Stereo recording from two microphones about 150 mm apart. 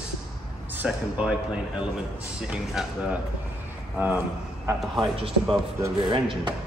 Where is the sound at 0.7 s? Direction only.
5° right (ahead or behind).